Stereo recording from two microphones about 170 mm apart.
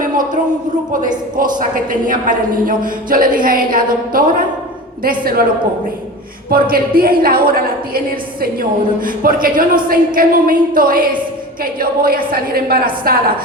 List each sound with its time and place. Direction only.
1.4 s a woman's voice: 50° right (ahead or behind)
6.5 s a woman's voice: 60° right (ahead or behind)